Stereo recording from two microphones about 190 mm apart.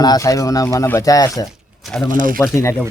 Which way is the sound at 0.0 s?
20° left (ahead or behind).